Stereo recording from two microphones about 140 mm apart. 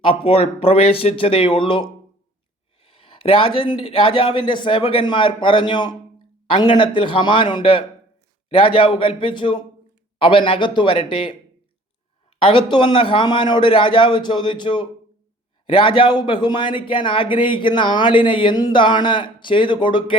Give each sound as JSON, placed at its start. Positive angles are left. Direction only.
{"t": 0.0, "sound": "a man's voice", "side_deg": 40}
{"t": 12.4, "sound": "a man's voice", "side_deg": 35}